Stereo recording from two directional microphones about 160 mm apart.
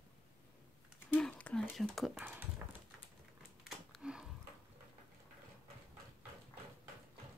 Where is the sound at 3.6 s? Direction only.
Centre (ahead or behind).